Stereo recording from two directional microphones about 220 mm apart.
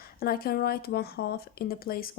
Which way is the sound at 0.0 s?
45° left (ahead or behind).